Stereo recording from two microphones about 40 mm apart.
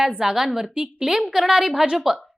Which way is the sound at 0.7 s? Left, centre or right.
Right.